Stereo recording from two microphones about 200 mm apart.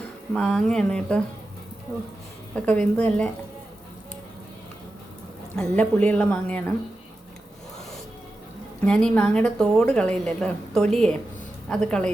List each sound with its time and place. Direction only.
0.3 s a woman's voice: 5° left (ahead or behind)
2.6 s a woman's voice: 5° left (ahead or behind)
5.5 s a woman's voice: 5° left (ahead or behind)
8.9 s a woman's voice: 5° left (ahead or behind)